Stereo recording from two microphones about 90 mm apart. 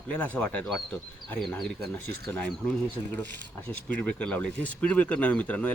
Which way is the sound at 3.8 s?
15° left (ahead or behind).